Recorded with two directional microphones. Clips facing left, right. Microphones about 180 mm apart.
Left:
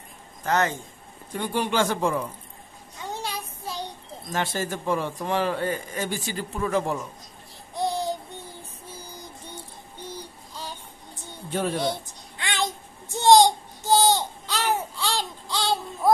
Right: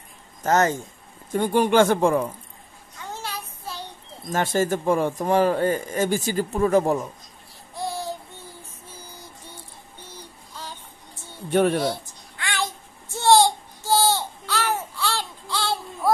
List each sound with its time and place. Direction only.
0.4 s speech: 40° right (ahead or behind)
3.1 s child singing: 15° left (ahead or behind)
4.3 s speech: 45° right (ahead or behind)
7.7 s child singing: 20° left (ahead or behind)
10.1 s child singing: 15° left (ahead or behind)
11.5 s speech: 60° right (ahead or behind)
12.4 s a sound: 20° left (ahead or behind)